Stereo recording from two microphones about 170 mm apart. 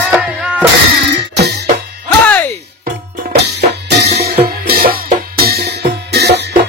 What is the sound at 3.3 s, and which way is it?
Music, 75° right (ahead or behind).